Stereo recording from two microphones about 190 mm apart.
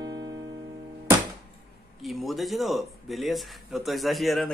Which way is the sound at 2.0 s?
Centre (ahead or behind).